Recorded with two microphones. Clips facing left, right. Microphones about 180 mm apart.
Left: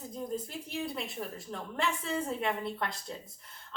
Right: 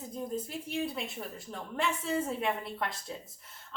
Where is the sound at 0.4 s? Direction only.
Centre (ahead or behind).